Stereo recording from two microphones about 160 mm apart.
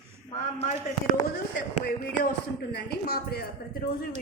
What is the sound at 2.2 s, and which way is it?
Speech, 80° left.